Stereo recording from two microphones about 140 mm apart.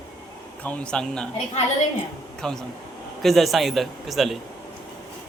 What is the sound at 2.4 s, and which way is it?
A man's voice, 5° left (ahead or behind).